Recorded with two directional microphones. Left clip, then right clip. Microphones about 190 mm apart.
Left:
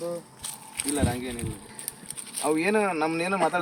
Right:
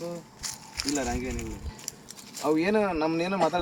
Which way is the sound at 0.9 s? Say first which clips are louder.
Left 3 dB; 5° left (ahead or behind).